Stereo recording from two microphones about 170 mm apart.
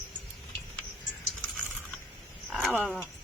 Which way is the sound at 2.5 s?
Centre (ahead or behind).